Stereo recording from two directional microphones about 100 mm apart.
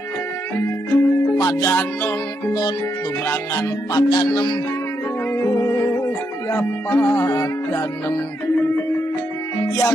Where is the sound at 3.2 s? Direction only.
30° left (ahead or behind).